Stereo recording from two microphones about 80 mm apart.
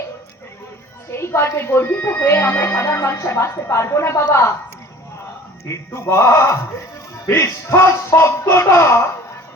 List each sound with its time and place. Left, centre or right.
1.1 s speech: left
5.6 s speech: left